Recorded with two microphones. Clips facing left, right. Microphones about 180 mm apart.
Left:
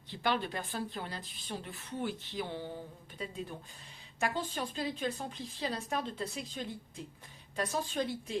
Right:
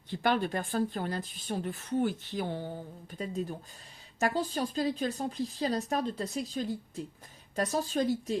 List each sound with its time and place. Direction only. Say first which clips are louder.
0.1 s a woman's voice: right 5 dB; 45° right (ahead or behind)